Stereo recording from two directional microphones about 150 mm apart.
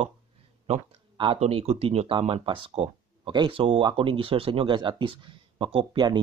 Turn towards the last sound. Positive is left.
turn(degrees=-30)  # may be behind; listen again after turning